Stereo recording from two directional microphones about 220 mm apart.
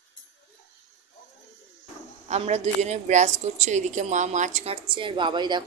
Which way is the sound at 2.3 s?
30° right (ahead or behind).